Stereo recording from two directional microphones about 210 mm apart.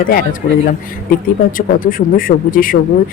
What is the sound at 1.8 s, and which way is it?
Speech, 40° left (ahead or behind).